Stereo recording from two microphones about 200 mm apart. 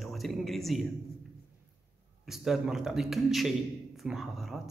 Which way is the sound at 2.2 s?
Centre (ahead or behind).